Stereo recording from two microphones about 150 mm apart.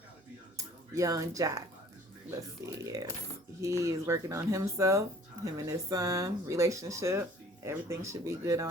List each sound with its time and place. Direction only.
0.5 s speech: 20° right (ahead or behind)
2.8 s speech: 25° right (ahead or behind)